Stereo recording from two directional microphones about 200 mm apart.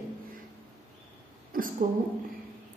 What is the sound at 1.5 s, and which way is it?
Speech, 45° right (ahead or behind).